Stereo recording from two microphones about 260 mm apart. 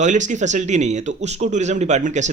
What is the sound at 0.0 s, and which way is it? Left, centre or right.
A woman's voice, right.